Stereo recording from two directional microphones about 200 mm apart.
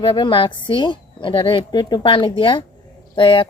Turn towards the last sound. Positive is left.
turn(degrees=25)  # may be behind; listen again after turning